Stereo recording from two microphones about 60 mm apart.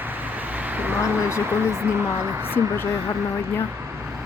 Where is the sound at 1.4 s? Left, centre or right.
Right.